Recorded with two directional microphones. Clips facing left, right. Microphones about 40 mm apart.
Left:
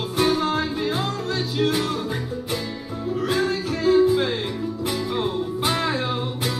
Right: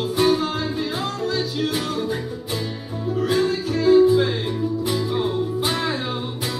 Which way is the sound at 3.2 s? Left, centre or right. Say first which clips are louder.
Right 2 dB; left.